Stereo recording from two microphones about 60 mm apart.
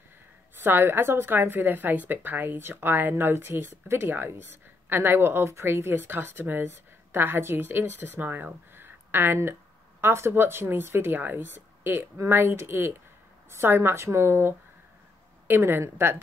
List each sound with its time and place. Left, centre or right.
0.6 s a woman's voice: right